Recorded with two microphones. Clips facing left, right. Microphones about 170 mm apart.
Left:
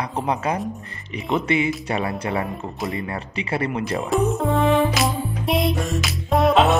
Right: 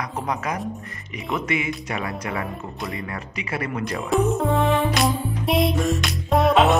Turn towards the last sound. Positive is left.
turn(degrees=0)  # may be behind; listen again after turning